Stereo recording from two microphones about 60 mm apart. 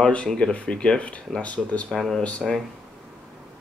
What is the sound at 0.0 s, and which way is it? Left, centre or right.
Speech, centre.